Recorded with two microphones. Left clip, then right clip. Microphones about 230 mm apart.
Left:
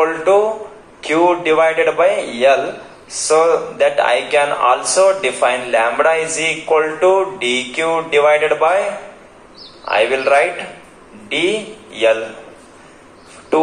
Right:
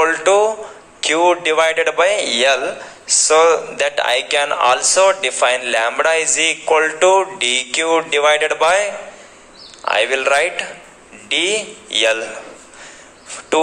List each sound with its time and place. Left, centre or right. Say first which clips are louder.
0.0 s a man's voice: even; right
9.8 s a man's voice: left 1 dB; right